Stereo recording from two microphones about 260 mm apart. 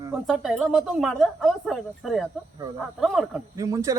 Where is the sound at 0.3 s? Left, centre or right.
Centre.